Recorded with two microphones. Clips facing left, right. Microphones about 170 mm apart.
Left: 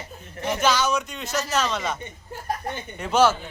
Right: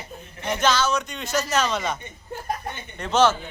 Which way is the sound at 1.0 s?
5° left (ahead or behind).